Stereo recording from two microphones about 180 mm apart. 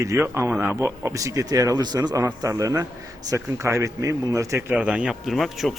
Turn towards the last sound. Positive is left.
turn(degrees=0)  # may be behind; listen again after turning